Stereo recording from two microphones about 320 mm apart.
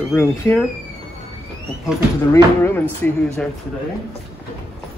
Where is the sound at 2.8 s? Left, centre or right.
Centre.